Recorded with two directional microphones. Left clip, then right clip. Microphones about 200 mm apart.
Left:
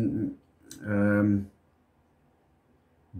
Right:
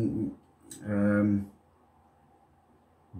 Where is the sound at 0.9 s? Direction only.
15° left (ahead or behind).